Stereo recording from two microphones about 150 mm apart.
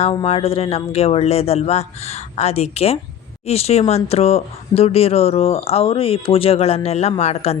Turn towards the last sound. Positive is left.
turn(degrees=45)  # may be behind; listen again after turning